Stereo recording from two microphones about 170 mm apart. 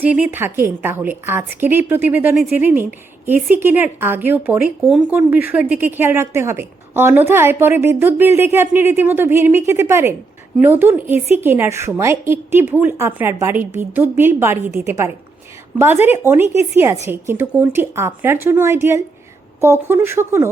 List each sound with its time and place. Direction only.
0.0 s a woman's voice: 10° right (ahead or behind)